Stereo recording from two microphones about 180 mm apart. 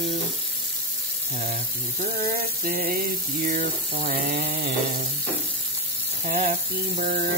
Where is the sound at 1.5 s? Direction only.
50° right (ahead or behind).